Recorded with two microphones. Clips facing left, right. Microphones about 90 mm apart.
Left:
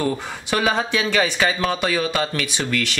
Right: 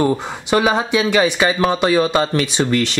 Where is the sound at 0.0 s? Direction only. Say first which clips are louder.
Right 6 dB; 20° right (ahead or behind).